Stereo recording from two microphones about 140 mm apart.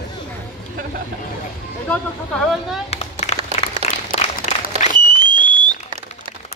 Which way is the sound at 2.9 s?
50° left (ahead or behind).